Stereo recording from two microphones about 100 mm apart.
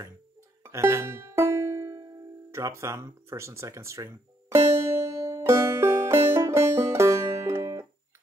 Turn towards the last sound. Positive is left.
turn(degrees=-30)  # may be behind; listen again after turning